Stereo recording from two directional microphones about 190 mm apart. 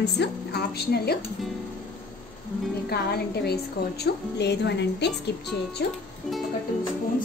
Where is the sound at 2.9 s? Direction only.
55° left (ahead or behind).